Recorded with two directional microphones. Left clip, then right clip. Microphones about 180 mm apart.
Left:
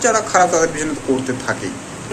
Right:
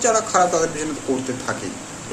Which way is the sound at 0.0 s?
15° right (ahead or behind).